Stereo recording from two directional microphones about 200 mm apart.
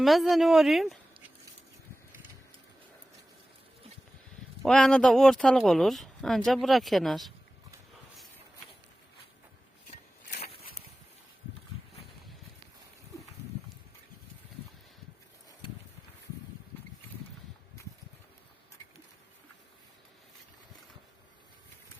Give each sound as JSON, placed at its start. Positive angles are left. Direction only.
{"t": 0.0, "sound": "speech", "side_deg": 0}
{"t": 4.6, "sound": "speech", "side_deg": 5}